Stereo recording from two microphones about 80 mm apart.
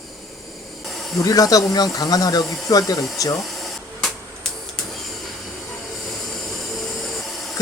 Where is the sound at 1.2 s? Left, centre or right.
Left.